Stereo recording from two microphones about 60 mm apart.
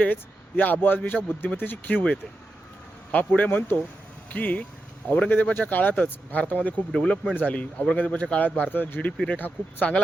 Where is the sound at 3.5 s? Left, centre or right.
Left.